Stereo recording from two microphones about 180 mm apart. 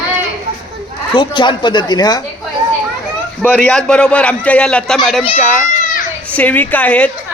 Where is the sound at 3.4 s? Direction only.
10° left (ahead or behind).